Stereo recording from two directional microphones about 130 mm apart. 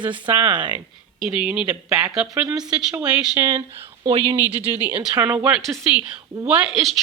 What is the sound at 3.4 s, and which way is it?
Speech, 20° right (ahead or behind).